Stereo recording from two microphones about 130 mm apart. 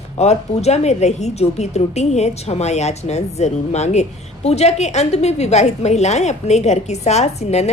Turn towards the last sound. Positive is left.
turn(degrees=55)  # may be behind; listen again after turning